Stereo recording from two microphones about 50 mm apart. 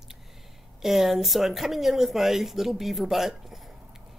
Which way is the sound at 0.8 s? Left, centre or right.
Centre.